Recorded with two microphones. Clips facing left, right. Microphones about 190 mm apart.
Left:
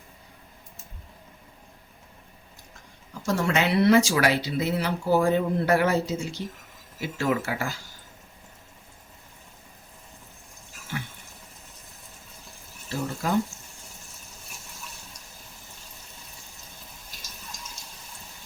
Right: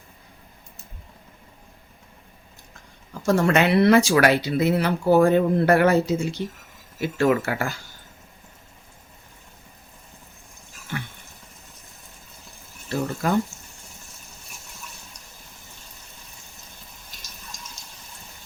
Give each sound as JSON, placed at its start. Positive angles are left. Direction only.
{"t": 3.2, "sound": "speech", "side_deg": -55}
{"t": 13.2, "sound": "speech", "side_deg": -60}